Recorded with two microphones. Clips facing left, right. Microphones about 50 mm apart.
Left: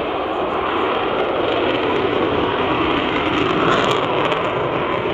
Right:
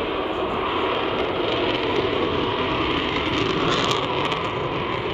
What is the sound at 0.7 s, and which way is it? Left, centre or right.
Vehicle, centre.